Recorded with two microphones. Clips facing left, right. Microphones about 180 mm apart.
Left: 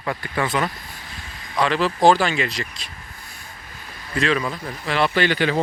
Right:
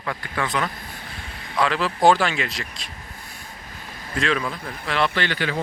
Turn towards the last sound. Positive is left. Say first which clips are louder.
# left 5 dB
turn(degrees=20)  # may be behind; listen again after turning